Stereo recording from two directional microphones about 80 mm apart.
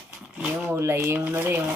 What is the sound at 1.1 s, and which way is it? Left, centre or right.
Stir, right.